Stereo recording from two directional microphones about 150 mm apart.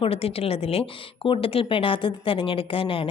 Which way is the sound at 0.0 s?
40° left (ahead or behind).